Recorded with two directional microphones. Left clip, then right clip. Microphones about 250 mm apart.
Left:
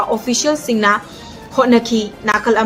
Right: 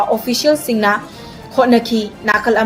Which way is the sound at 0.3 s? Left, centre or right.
Centre.